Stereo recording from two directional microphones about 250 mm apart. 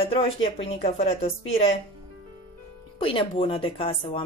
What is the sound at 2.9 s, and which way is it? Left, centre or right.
Speech, left.